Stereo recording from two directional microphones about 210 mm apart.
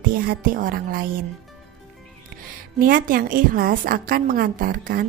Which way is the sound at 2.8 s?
40° right (ahead or behind).